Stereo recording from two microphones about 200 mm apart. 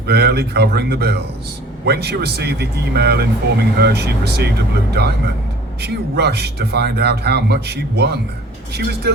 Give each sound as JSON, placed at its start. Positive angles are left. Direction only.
{"t": 0.1, "sound": "a man's voice", "side_deg": -55}